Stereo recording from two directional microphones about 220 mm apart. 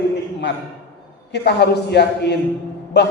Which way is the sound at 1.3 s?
50° left (ahead or behind).